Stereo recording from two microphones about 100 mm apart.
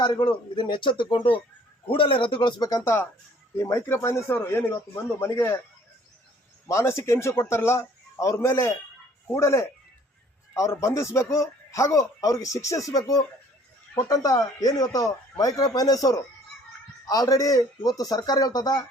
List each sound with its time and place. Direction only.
0.0 s speech: 50° left (ahead or behind)
2.6 s a man's voice: 40° left (ahead or behind)
2.8 s a man's voice: 25° left (ahead or behind)
6.7 s a man's voice: 30° left (ahead or behind)